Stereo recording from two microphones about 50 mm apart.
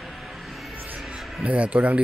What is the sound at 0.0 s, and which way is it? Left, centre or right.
Music, centre.